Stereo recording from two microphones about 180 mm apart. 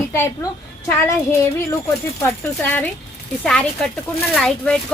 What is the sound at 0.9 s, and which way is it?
Speech, 15° left (ahead or behind).